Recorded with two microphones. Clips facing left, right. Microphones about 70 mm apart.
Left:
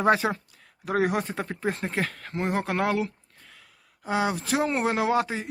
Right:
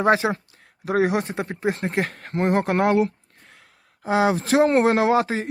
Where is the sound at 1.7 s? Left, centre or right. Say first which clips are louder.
Right 4 dB; right.